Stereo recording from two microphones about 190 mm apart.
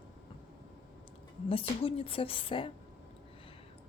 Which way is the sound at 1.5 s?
30° left (ahead or behind).